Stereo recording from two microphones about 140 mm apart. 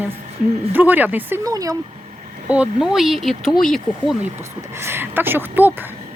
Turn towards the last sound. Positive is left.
turn(degrees=-15)  # may be behind; listen again after turning